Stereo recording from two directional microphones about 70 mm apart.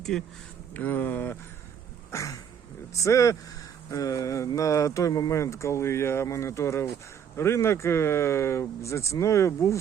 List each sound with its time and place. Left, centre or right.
0.0 s speech: centre
0.7 s speech: left
2.0 s a sound: left
2.9 s speech: left